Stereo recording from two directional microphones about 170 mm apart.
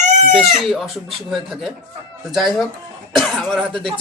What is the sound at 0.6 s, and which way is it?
Speech, centre (ahead or behind).